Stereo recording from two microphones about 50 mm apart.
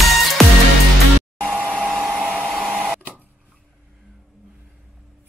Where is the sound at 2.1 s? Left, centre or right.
Centre.